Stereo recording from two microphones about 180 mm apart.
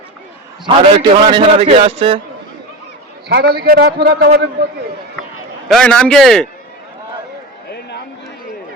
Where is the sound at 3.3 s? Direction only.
60° right (ahead or behind).